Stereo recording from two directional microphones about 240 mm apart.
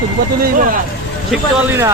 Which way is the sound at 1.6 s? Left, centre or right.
Centre.